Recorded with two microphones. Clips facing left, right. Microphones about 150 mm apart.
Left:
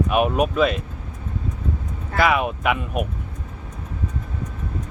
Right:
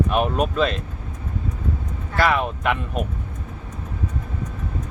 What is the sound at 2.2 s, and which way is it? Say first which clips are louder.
Speech: left 1 dB; 10° left (ahead or behind).